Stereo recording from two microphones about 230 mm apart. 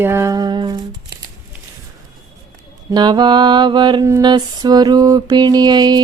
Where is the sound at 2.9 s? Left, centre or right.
Centre.